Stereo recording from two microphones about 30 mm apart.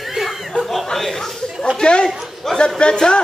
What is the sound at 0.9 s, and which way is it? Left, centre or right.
Speech, centre.